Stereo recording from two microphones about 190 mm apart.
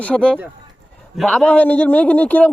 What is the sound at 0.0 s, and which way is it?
A man's voice, 5° left (ahead or behind).